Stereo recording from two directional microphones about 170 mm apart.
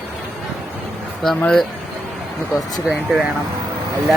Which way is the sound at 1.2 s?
Centre (ahead or behind).